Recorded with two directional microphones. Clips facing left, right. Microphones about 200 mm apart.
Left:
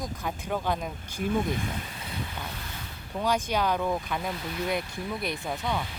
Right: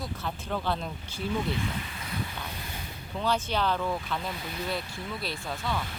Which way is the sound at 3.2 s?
10° left (ahead or behind).